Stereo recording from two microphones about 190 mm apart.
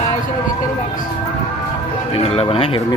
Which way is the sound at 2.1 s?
30° left (ahead or behind).